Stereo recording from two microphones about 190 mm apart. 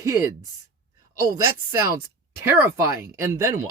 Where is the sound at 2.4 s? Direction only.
10° right (ahead or behind).